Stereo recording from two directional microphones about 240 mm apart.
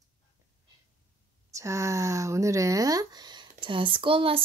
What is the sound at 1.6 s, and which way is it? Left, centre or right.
Speech, centre.